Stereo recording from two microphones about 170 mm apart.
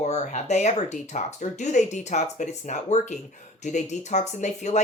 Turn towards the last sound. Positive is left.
turn(degrees=45)  # may be behind; listen again after turning